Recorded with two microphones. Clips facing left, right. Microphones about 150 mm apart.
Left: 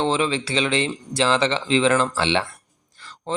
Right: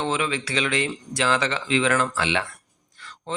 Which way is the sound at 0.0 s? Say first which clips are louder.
Left 4 dB; 30° left (ahead or behind).